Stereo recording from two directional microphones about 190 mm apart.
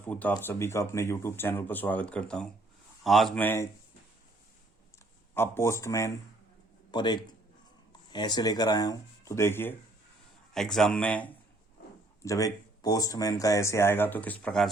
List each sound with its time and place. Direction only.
0.1 s speech: 10° left (ahead or behind)
5.3 s speech: 10° left (ahead or behind)
12.2 s speech: 15° left (ahead or behind)